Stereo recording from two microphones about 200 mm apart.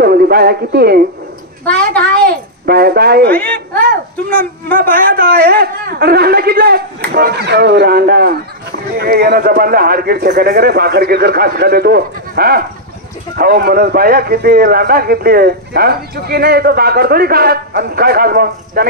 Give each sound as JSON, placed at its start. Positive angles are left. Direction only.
{"t": 0.0, "sound": "speech", "side_deg": -50}
{"t": 2.1, "sound": "a child's voice", "side_deg": -50}
{"t": 3.3, "sound": "speech", "side_deg": 5}
{"t": 4.9, "sound": "a man's voice", "side_deg": -45}